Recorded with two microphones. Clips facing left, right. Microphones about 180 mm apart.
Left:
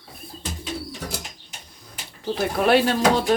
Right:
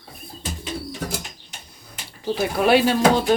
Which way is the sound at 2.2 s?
Centre (ahead or behind).